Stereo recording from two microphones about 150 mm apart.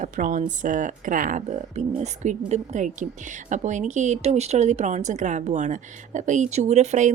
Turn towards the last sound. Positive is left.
turn(degrees=-50)  # may be behind; listen again after turning